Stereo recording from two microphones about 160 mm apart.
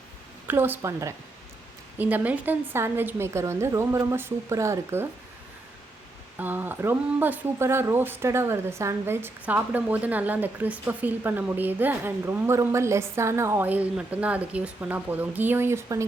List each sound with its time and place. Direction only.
0.4 s speech: 15° right (ahead or behind)
6.4 s speech: 10° right (ahead or behind)